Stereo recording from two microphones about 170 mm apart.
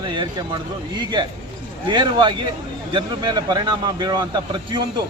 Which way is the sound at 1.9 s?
25° right (ahead or behind).